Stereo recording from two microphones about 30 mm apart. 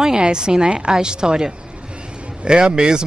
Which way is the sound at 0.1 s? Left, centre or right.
Right.